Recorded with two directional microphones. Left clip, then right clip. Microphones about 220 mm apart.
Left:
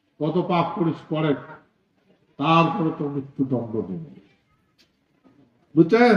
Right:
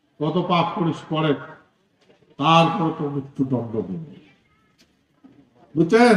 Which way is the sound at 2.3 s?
40° right (ahead or behind).